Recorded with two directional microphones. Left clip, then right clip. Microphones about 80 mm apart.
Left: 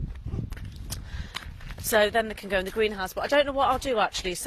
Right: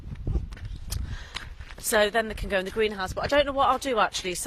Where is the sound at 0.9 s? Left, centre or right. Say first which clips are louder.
Right 1 dB; right.